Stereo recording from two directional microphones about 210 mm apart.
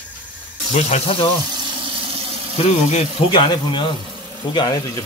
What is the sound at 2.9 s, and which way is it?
Speech, 25° left (ahead or behind).